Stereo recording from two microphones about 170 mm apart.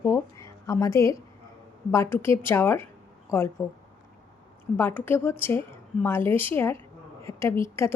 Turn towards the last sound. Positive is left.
turn(degrees=15)  # may be behind; listen again after turning